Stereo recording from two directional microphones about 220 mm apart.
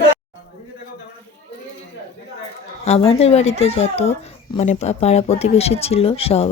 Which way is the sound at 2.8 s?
30° left (ahead or behind).